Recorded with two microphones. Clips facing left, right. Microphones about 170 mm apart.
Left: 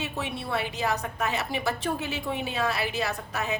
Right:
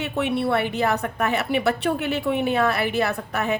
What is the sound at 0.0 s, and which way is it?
A woman's voice, 65° right (ahead or behind).